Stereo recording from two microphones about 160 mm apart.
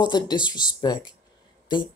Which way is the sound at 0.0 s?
25° left (ahead or behind).